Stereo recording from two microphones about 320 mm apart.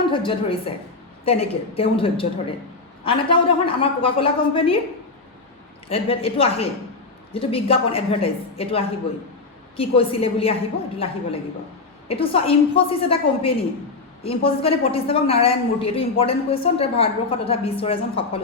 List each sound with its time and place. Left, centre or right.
0.1 s a woman's voice: centre
5.9 s a woman's voice: centre